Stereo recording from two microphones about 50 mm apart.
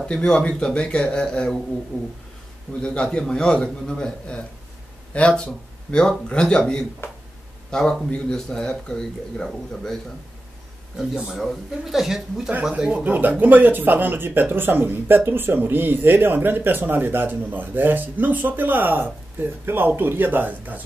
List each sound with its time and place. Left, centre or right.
0.0 s a man's voice: centre
1.9 s a sound: left
2.8 s a man's voice: centre
7.7 s a man's voice: centre
11.1 s speech: centre
12.7 s speech: right
13.0 s speech: right